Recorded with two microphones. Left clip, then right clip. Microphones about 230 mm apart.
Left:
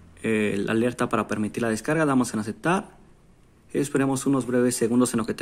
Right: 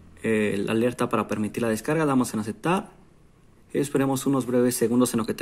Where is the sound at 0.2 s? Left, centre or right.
Centre.